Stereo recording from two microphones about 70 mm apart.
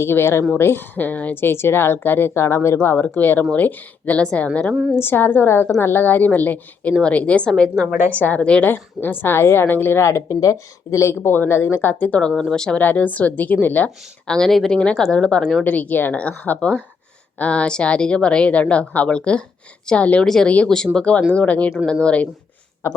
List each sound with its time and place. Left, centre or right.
0.0 s a woman's voice: left
1.4 s a woman's voice: left; by 4.6 s centre
4.7 s a woman's voice: centre
4.9 s a woman's voice: left; by 7.9 s centre
7.9 s a woman's voice: right
8.2 s speech: centre
8.7 s a woman's voice: left; by 12.8 s centre
12.8 s speech: left
14.3 s speech: centre
20.2 s speech: centre
22.8 s speech: left